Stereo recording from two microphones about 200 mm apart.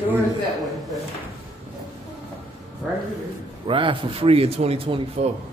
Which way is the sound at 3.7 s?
25° right (ahead or behind).